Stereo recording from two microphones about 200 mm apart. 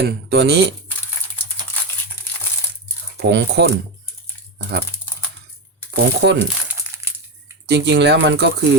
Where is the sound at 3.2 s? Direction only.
60° right (ahead or behind).